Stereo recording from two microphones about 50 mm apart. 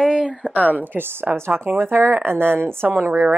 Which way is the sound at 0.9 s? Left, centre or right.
Right.